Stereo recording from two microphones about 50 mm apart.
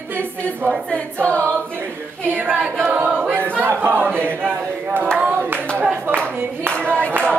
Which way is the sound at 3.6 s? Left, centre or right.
Right.